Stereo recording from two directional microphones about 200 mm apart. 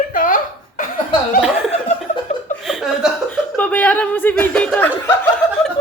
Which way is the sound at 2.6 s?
Centre (ahead or behind).